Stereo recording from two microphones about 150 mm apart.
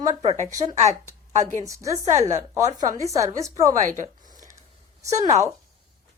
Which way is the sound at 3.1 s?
20° right (ahead or behind).